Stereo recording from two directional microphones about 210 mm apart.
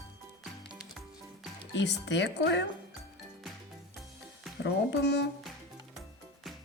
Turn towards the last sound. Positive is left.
turn(degrees=55)  # may be behind; listen again after turning